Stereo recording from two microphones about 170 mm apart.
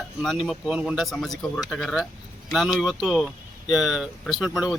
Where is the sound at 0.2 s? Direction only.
Centre (ahead or behind).